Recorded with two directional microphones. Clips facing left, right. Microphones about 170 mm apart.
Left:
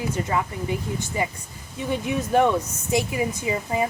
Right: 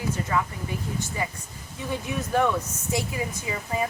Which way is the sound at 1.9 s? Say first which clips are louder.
Left 5 dB; 20° left (ahead or behind).